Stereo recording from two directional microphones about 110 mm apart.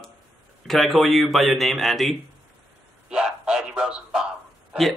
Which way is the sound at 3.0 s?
5° right (ahead or behind).